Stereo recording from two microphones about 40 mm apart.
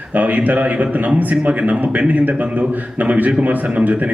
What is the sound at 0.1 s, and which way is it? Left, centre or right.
A man's voice, right.